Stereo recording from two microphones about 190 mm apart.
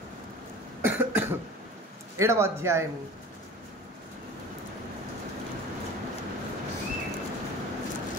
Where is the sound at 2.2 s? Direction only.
15° right (ahead or behind).